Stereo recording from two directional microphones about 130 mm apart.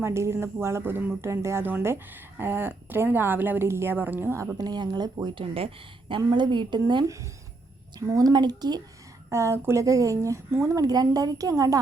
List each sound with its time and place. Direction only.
0.0 s a woman's voice: 20° right (ahead or behind)
9.3 s a woman's voice: 20° right (ahead or behind)